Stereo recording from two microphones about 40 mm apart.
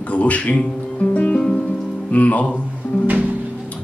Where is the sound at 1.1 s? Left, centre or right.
Left.